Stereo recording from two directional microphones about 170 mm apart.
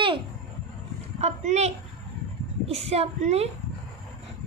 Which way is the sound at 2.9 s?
40° right (ahead or behind).